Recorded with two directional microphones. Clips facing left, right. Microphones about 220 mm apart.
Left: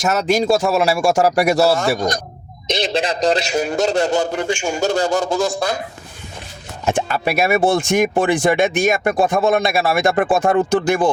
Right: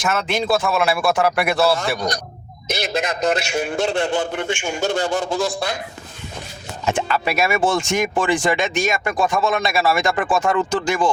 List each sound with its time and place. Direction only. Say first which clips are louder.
0.0 s a man's voice: left 5 dB; 40° left (ahead or behind)
2.7 s a man's voice: left 3 dB; 30° left (ahead or behind)
6.8 s speech: left 2 dB; 50° left (ahead or behind)